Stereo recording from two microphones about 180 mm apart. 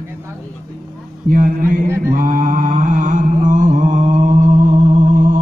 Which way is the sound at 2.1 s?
50° right (ahead or behind).